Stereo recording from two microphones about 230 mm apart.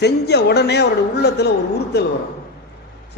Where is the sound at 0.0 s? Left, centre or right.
Left.